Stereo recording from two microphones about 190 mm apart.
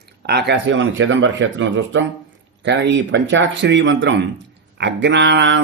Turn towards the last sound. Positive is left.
turn(degrees=-65)  # may be behind; listen again after turning